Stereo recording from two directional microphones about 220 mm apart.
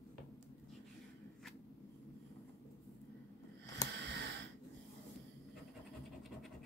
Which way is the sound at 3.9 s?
50° right (ahead or behind).